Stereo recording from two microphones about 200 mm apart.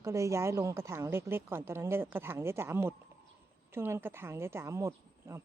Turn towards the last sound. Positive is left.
turn(degrees=-15)  # may be behind; listen again after turning